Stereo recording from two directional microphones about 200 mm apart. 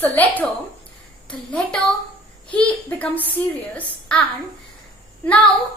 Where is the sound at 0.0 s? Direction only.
10° left (ahead or behind).